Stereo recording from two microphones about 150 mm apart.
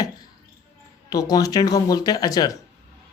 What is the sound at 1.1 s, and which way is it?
Speech, 25° left (ahead or behind).